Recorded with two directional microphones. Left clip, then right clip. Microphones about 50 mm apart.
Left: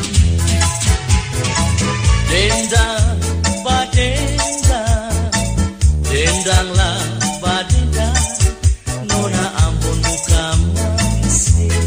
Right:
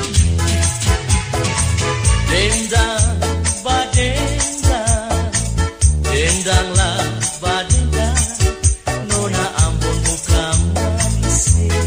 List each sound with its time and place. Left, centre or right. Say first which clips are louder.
1.5 s music: left 1 dB; centre
2.2 s music: left 2 dB; left
9.8 s music: left 1 dB; left